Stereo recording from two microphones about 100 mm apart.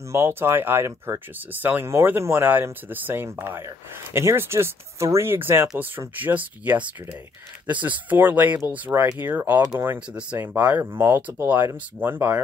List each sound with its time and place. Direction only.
0.1 s speech: 25° right (ahead or behind)